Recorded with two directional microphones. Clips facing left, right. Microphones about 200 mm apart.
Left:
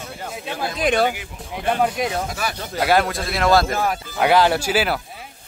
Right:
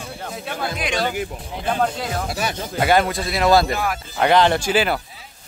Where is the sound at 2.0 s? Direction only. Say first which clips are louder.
Left 4 dB; 15° left (ahead or behind).